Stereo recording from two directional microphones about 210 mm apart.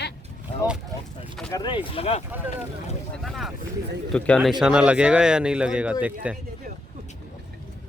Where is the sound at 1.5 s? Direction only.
20° left (ahead or behind).